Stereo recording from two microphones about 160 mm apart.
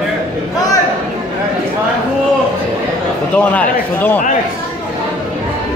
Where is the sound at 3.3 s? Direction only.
10° left (ahead or behind).